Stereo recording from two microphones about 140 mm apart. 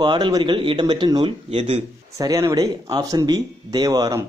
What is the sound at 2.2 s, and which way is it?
Speech, 25° right (ahead or behind).